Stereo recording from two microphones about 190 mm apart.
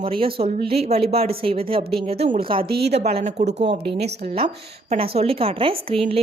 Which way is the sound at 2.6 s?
55° right (ahead or behind).